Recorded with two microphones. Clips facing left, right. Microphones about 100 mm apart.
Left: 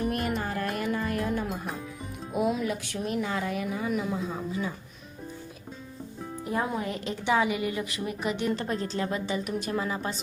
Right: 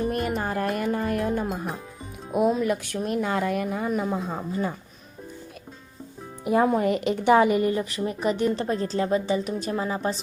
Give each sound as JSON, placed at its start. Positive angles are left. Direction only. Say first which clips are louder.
{"t": 0.3, "sound": "music", "louder": "right 4 dB", "side_deg": -45}
{"t": 2.3, "sound": "speech", "louder": "right 5 dB", "side_deg": -45}
{"t": 6.7, "sound": "a woman's voice", "louder": "right 9 dB", "side_deg": -60}